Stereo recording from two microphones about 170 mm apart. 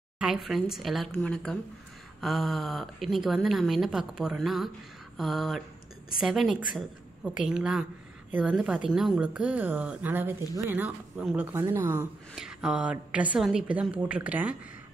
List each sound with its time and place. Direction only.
0.2 s speech: centre (ahead or behind)